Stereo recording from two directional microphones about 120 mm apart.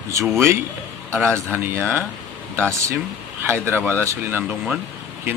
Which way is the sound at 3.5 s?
20° right (ahead or behind).